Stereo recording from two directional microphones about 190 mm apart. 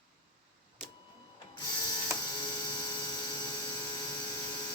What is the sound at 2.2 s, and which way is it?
Dental drill, 20° left (ahead or behind).